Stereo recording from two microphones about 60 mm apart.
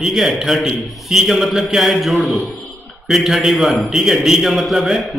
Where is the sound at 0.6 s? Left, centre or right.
Centre.